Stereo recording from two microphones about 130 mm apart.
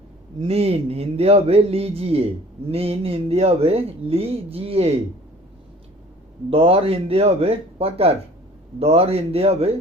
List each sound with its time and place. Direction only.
0.3 s speech: 50° right (ahead or behind)
6.5 s speech: 45° right (ahead or behind)